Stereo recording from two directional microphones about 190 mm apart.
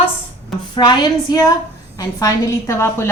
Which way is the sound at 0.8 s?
20° left (ahead or behind).